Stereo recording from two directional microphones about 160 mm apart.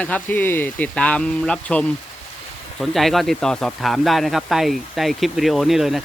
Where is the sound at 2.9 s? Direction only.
Centre (ahead or behind).